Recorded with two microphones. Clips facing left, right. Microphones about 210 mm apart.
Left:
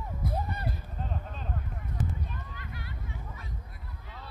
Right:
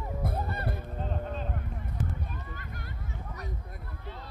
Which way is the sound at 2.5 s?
45° right (ahead or behind).